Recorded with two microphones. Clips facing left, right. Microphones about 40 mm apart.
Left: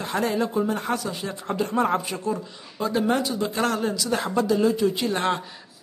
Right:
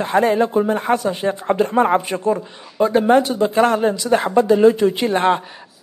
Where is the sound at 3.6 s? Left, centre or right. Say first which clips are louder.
Right 9 dB; right.